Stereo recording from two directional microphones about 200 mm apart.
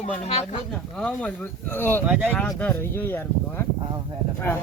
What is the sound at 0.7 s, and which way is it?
Speech, 5° left (ahead or behind).